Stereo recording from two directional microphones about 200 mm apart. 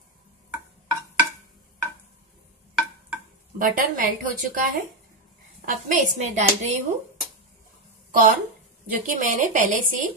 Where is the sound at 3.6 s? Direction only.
45° right (ahead or behind).